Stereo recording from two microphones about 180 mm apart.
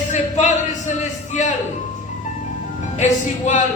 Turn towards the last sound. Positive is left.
turn(degrees=40)  # may be behind; listen again after turning